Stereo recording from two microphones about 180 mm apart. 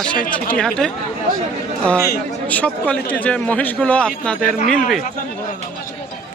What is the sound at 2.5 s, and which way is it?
A man's voice, 10° left (ahead or behind).